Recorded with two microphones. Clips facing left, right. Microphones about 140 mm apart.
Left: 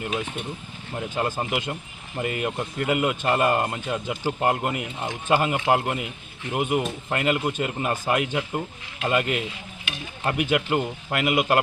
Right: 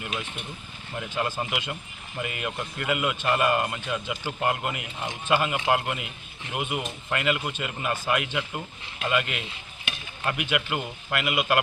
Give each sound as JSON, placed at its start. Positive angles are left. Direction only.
{"t": 1.1, "sound": "a man's voice", "side_deg": 40}